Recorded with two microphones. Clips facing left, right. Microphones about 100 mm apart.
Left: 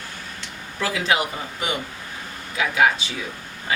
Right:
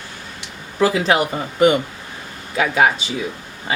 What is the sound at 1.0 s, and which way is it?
Speech, 45° right (ahead or behind).